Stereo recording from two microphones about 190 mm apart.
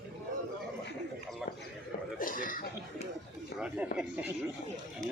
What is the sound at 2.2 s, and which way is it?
Cough, 45° left (ahead or behind).